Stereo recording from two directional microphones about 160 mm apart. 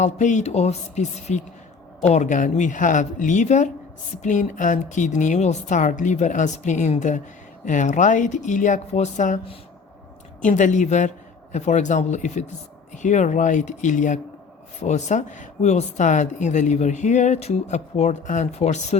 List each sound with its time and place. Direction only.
0.0 s speech: 50° left (ahead or behind)
10.4 s speech: 50° left (ahead or behind)